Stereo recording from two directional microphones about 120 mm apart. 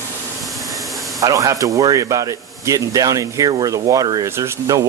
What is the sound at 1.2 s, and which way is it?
Speech, 25° right (ahead or behind).